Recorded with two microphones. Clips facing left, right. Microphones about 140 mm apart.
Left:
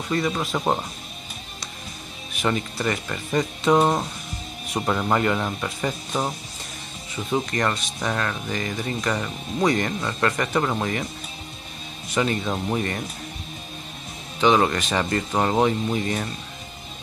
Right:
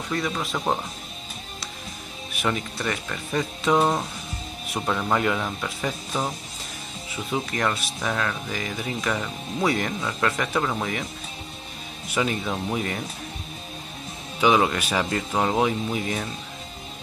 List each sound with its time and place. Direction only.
0.1 s speech: centre (ahead or behind)
2.3 s speech: centre (ahead or behind)
12.1 s speech: 5° right (ahead or behind)
14.4 s speech: 5° right (ahead or behind)